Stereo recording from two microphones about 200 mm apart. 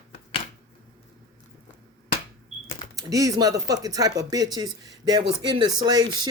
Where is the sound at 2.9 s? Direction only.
15° right (ahead or behind).